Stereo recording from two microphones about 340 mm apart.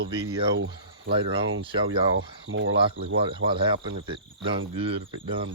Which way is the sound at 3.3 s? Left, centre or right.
Centre.